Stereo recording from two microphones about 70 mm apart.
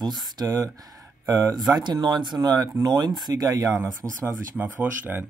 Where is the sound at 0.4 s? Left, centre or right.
Right.